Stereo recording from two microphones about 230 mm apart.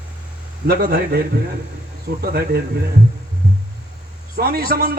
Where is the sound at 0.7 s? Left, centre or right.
Right.